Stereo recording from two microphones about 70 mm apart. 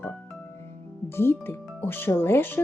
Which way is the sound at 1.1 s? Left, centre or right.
Left.